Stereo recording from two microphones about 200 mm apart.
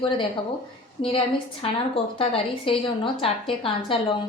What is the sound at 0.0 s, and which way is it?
Speech, 25° left (ahead or behind).